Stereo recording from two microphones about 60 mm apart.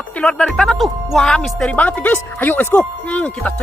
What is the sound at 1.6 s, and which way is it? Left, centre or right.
Speech, left.